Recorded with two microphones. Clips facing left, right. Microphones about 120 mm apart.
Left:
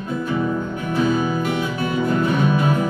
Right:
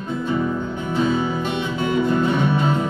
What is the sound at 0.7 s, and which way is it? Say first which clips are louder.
Music: left 1 dB; 25° right (ahead or behind).